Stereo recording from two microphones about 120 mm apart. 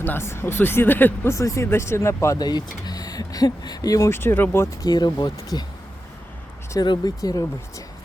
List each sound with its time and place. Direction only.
0.0 s speech: 20° left (ahead or behind)
4.9 s speech: 35° left (ahead or behind)
6.7 s speech: 35° left (ahead or behind)